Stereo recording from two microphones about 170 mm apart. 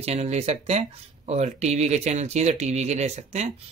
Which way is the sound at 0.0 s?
40° right (ahead or behind).